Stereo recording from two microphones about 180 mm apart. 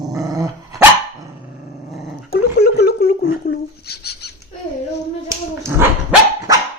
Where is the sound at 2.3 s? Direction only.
60° left (ahead or behind).